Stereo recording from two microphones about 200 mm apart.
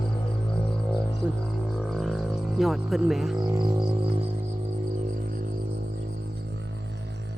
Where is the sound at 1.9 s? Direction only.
Centre (ahead or behind).